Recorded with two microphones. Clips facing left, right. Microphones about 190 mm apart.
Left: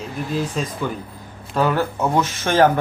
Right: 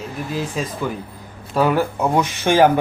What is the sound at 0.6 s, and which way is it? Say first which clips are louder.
A man's voice: right 1 dB; 5° right (ahead or behind).